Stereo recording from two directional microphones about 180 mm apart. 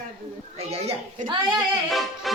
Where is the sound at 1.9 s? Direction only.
Centre (ahead or behind).